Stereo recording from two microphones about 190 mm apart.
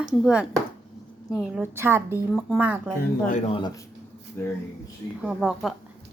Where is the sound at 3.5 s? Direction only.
20° left (ahead or behind).